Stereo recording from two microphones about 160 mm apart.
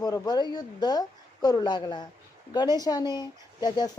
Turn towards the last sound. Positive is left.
turn(degrees=25)  # may be behind; listen again after turning